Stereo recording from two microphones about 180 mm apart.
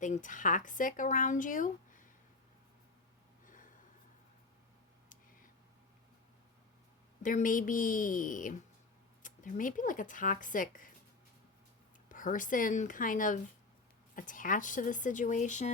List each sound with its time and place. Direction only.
0.0 s speech: 45° left (ahead or behind)
3.4 s snort: 50° left (ahead or behind)
7.2 s speech: 50° left (ahead or behind)
12.0 s speech: 50° left (ahead or behind)